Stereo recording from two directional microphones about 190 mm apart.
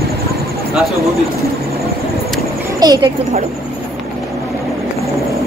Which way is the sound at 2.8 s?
20° right (ahead or behind).